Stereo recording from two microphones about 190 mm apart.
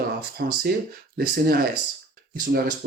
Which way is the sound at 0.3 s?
55° right (ahead or behind).